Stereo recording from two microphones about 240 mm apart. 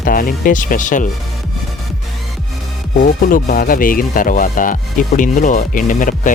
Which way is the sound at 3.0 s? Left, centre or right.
Left.